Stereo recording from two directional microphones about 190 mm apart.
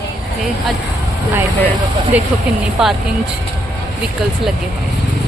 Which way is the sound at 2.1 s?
10° right (ahead or behind).